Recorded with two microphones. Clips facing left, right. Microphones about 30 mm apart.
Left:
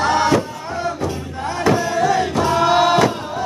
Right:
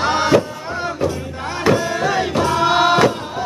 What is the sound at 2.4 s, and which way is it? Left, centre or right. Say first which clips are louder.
Choir: even; centre.